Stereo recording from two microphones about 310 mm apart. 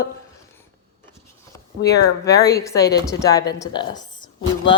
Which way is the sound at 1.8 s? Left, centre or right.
Centre.